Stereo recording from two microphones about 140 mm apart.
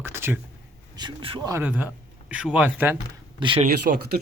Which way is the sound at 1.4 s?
25° right (ahead or behind).